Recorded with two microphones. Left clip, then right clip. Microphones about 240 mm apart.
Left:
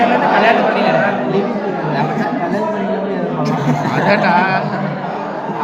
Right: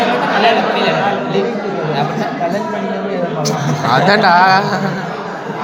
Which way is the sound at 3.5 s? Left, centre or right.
Right.